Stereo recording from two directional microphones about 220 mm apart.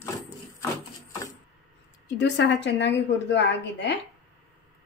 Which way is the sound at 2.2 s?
50° left (ahead or behind).